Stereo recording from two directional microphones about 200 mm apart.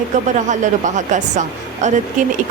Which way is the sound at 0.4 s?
40° right (ahead or behind).